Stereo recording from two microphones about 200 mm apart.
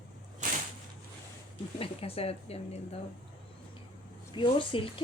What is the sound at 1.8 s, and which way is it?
A woman's voice, 30° left (ahead or behind).